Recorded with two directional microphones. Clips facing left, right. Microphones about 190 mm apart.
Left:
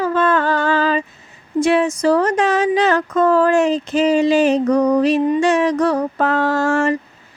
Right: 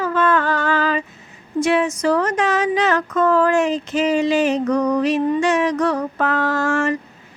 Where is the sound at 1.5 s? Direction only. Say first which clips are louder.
Left 2 dB; 30° left (ahead or behind).